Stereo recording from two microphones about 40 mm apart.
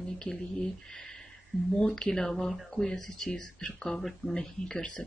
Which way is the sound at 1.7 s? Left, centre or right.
Centre.